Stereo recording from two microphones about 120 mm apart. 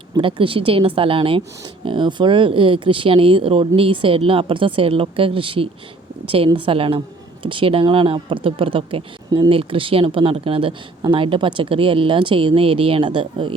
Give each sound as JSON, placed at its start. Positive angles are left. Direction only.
{"t": 0.2, "sound": "speech", "side_deg": -45}